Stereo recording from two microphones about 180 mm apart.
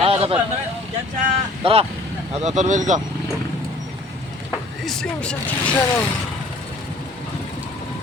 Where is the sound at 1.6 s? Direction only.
30° right (ahead or behind).